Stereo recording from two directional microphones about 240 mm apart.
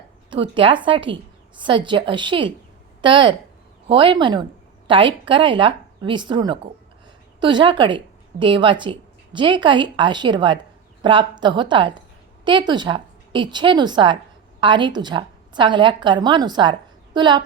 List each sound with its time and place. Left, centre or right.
0.5 s a woman's voice: right